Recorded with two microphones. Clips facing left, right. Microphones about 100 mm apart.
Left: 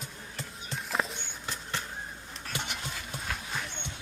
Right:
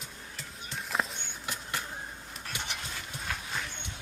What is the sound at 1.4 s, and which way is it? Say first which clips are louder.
Vehicle: even; 10° right (ahead or behind).